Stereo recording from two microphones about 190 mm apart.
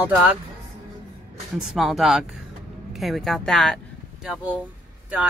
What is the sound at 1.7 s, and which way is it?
Speech, centre (ahead or behind).